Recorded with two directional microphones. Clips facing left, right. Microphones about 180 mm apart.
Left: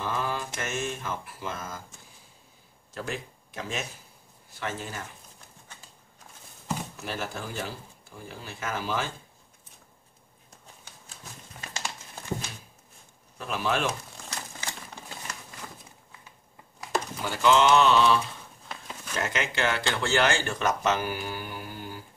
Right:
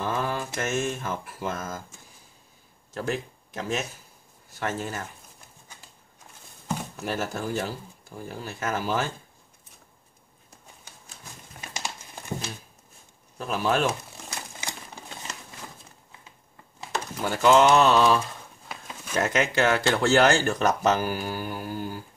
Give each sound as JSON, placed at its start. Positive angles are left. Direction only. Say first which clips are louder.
{"t": 0.0, "sound": "mantra", "louder": "right 3 dB", "side_deg": -45}
{"t": 3.1, "sound": "speech", "louder": "right 8 dB", "side_deg": -45}
{"t": 4.6, "sound": "mantra", "louder": "right 4 dB", "side_deg": -45}
{"t": 7.1, "sound": "mantra", "louder": "right 6 dB", "side_deg": -45}
{"t": 11.7, "sound": "crumpling", "louder": "right 2 dB", "side_deg": -15}
{"t": 13.4, "sound": "speech", "louder": "right 4 dB", "side_deg": -40}
{"t": 14.3, "sound": "typewriter", "louder": "right 1 dB", "side_deg": -15}
{"t": 17.2, "sound": "mantra", "louder": "right 4 dB", "side_deg": -45}
{"t": 19.1, "sound": "speech", "louder": "right 6 dB", "side_deg": -45}